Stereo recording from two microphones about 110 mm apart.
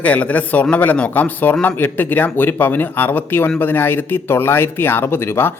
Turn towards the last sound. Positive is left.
turn(degrees=20)  # may be behind; listen again after turning